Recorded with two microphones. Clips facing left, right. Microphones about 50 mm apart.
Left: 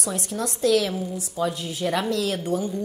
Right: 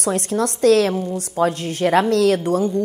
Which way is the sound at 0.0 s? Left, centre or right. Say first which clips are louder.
Right 8 dB; right.